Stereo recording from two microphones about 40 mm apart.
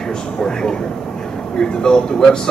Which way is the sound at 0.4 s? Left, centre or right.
Centre.